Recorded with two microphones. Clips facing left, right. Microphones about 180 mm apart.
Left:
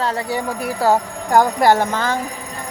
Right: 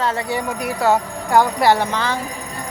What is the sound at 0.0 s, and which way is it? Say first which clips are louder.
A woman's voice: even; 35° left (ahead or behind).